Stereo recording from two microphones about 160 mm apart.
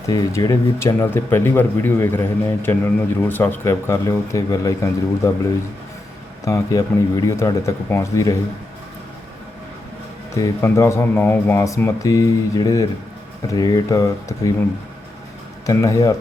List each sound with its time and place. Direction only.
0.1 s speech: 20° left (ahead or behind)
6.4 s speech: 20° left (ahead or behind)
10.4 s speech: 20° left (ahead or behind)
15.6 s speech: 20° left (ahead or behind)